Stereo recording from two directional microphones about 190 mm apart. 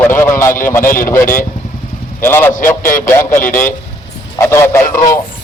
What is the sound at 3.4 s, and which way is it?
Speech, 45° left (ahead or behind).